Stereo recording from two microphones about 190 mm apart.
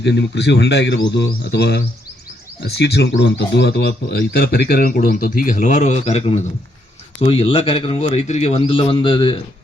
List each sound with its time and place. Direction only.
0.0 s a man's voice: 65° left (ahead or behind); by 9.4 s 25° left (ahead or behind)